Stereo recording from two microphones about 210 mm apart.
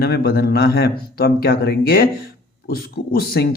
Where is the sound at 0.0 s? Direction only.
50° left (ahead or behind).